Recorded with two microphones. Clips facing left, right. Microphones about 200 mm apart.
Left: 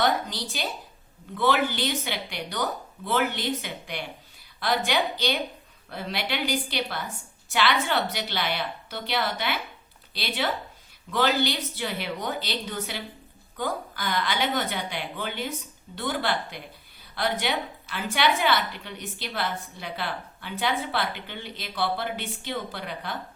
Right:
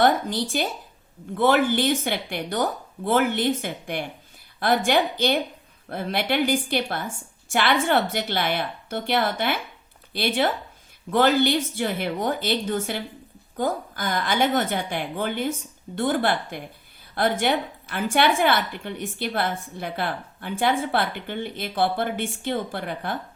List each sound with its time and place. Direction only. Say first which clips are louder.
0.5 s a woman's voice: right 6 dB; 55° right (ahead or behind)